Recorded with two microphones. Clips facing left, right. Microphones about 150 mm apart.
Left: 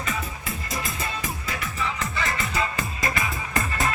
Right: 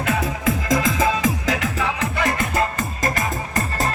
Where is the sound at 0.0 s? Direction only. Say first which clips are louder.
Right 10 dB; 80° right.